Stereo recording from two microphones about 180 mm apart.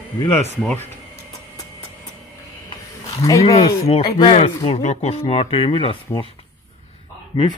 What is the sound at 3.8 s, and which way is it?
Speech, 35° left (ahead or behind).